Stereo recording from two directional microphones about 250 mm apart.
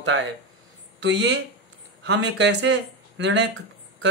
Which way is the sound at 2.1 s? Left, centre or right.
Right.